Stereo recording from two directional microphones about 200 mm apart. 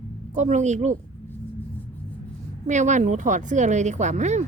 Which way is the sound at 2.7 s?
35° right (ahead or behind).